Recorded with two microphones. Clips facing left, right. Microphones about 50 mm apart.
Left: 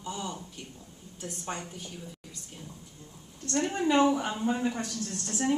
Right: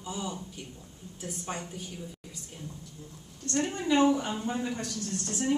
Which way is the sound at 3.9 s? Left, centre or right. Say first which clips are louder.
Right 2 dB; centre.